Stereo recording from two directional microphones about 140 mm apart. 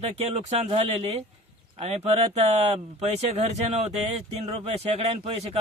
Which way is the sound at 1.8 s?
50° right (ahead or behind).